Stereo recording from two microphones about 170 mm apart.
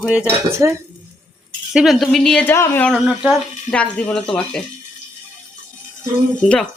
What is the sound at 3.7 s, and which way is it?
Cutlery, 5° left (ahead or behind).